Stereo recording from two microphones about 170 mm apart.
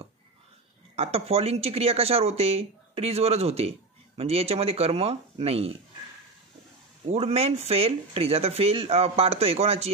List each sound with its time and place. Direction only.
0.9 s speech: 35° right (ahead or behind)
7.1 s speech: 35° right (ahead or behind)